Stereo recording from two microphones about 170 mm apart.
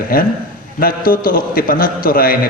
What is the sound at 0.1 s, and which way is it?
A man's voice, 60° left (ahead or behind).